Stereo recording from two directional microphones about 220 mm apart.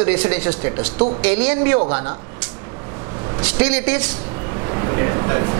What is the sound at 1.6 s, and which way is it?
Speech, 20° right (ahead or behind).